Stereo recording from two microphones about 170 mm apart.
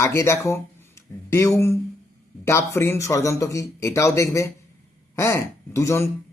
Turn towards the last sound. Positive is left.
turn(degrees=15)  # may be behind; listen again after turning